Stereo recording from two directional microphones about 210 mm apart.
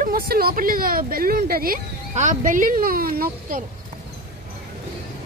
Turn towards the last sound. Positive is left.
turn(degrees=-45)  # may be behind; listen again after turning